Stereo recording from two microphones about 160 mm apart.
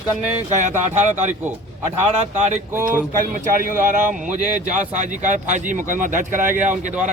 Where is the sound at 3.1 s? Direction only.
60° right (ahead or behind).